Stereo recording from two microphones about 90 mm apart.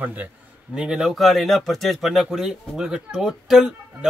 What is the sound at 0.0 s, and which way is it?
Speech, 20° right (ahead or behind).